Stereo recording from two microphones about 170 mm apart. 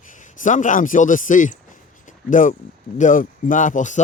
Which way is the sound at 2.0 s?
50° left (ahead or behind).